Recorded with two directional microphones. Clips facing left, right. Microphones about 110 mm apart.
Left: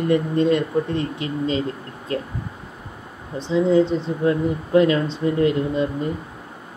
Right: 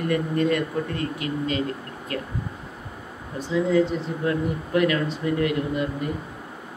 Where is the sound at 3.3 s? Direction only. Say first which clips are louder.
Left 4 dB; 25° left (ahead or behind).